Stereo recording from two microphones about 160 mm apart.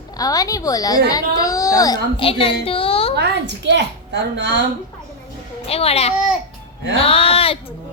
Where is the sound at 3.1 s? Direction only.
90° right.